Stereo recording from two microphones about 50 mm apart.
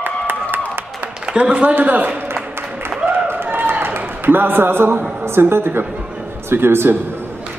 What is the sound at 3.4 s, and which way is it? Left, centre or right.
Run, right.